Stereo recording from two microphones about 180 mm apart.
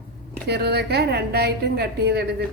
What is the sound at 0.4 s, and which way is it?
A woman's voice, 65° right (ahead or behind).